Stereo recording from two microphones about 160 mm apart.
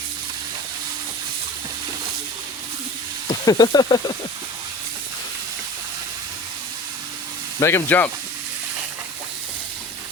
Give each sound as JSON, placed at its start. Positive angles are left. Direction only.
{"t": 3.4, "sound": "speech", "side_deg": 25}
{"t": 7.6, "sound": "speech", "side_deg": 15}